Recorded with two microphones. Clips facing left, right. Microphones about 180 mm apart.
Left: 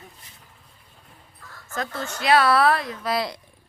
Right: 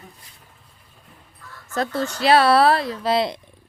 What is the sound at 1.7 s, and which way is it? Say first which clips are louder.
Speech: right 6 dB; 35° right (ahead or behind).